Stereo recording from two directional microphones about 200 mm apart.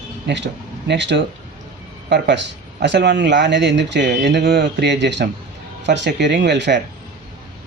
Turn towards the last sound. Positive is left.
turn(degrees=-60)  # may be behind; listen again after turning